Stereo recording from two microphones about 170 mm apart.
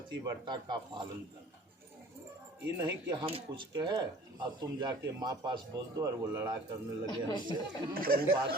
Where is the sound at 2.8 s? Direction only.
20° right (ahead or behind).